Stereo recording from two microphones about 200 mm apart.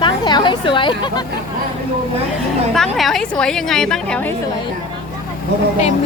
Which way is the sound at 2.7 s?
Centre (ahead or behind).